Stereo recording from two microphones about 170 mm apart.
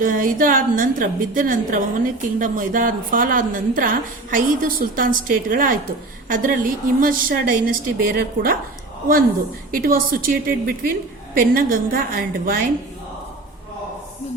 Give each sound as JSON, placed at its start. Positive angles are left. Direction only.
{"t": 0.0, "sound": "a woman's voice", "side_deg": -55}
{"t": 9.7, "sound": "a woman's voice", "side_deg": -60}